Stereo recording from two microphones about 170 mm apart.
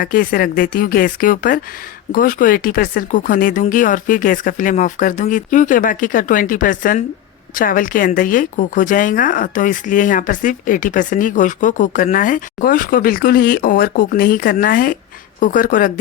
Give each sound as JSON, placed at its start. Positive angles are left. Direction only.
{"t": 0.0, "sound": "a woman's voice", "side_deg": 55}